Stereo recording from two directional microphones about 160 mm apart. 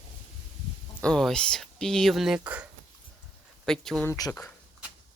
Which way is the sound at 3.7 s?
5° left (ahead or behind).